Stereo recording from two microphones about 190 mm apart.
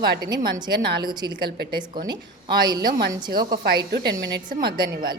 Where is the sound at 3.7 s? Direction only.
55° right (ahead or behind).